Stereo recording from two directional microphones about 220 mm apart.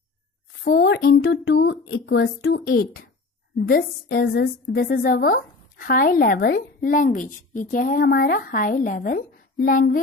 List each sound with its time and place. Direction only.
0.7 s a woman's voice: 50° left (ahead or behind)